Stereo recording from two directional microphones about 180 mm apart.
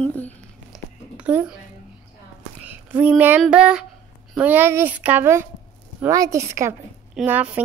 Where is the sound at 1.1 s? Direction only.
5° right (ahead or behind).